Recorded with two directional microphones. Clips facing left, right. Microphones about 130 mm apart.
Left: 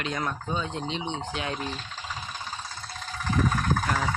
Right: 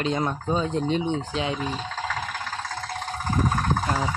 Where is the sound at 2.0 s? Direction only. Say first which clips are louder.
Right 7 dB; 90° right; by 3.2 s 60° right (ahead or behind).